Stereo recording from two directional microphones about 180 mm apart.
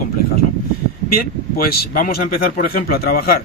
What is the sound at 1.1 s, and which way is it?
Speech, 55° left (ahead or behind).